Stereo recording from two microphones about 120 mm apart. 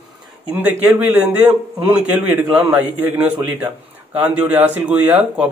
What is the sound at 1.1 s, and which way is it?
A man's voice, 15° right (ahead or behind).